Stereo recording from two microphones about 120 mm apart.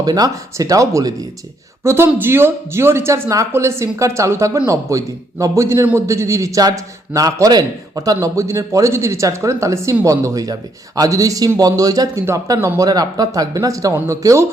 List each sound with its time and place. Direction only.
0.0 s speech: 30° right (ahead or behind)
12.9 s speech: 30° right (ahead or behind)